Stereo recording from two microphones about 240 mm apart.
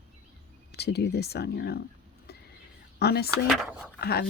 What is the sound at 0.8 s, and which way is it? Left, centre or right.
Speech, left.